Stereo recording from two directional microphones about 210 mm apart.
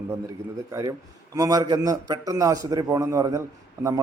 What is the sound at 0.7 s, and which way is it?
A man's voice, 15° right (ahead or behind).